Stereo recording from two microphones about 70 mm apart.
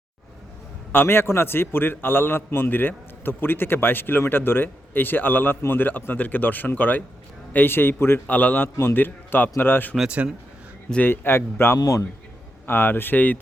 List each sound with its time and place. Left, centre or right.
0.9 s a man's voice: left
11.0 s a man's voice: left
11.8 s a man's voice: left
12.6 s a man's voice: left